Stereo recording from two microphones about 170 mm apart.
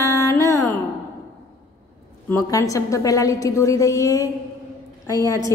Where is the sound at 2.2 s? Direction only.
15° left (ahead or behind).